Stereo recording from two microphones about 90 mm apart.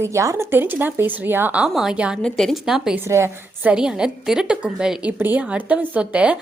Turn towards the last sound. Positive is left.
turn(degrees=-15)  # may be behind; listen again after turning